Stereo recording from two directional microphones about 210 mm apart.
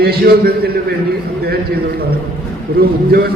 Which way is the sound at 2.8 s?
50° right (ahead or behind).